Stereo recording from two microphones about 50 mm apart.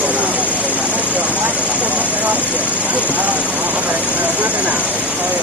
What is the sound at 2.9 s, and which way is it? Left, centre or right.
Speech, right.